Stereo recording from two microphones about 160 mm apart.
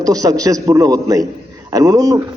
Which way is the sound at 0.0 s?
20° right (ahead or behind).